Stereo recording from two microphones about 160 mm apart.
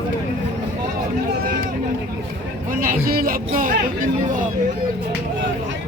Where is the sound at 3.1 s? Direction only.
70° right (ahead or behind).